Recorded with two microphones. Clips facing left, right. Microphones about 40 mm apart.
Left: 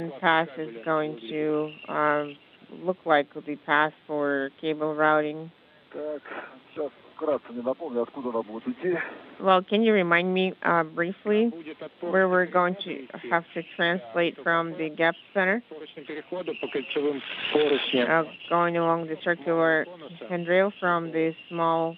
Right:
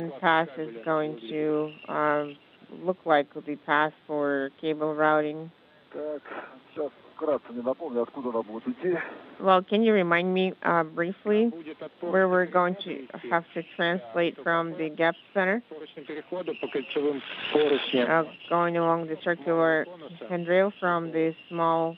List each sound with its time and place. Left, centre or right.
0.0 s speech: left
2.9 s speech: centre
6.0 s speech: centre